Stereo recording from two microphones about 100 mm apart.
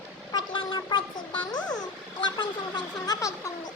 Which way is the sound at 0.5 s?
50° left (ahead or behind).